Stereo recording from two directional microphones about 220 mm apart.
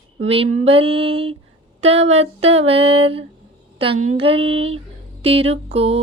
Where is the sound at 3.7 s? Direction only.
25° right (ahead or behind).